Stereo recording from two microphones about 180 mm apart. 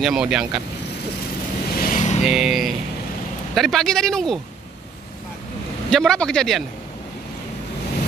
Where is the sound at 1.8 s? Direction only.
45° left (ahead or behind).